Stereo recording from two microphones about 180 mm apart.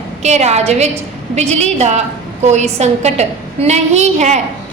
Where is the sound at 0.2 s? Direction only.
40° right (ahead or behind).